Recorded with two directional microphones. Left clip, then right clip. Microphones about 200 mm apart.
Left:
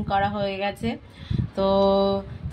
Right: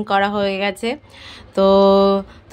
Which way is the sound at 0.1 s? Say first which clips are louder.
Right 6 dB; 30° right (ahead or behind).